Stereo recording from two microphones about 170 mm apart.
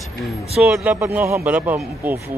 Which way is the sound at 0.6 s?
5° right (ahead or behind).